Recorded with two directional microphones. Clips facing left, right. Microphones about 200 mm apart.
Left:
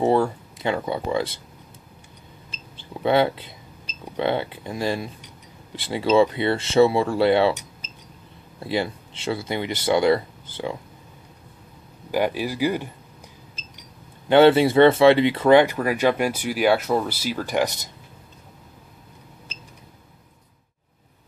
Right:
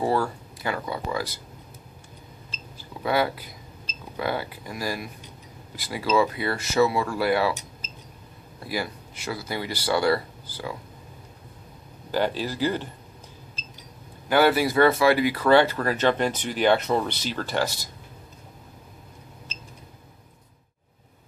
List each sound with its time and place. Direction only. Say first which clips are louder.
0.0 s speech: left 5 dB; 20° left (ahead or behind)
2.8 s speech: left 5 dB; 25° left (ahead or behind)
8.5 s speech: left 5 dB; 25° left (ahead or behind)
12.1 s speech: left 2 dB; 15° left (ahead or behind)
14.3 s speech: left 6 dB; 25° left (ahead or behind)